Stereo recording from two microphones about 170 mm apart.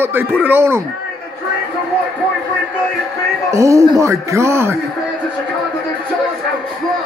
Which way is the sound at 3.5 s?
20° right (ahead or behind).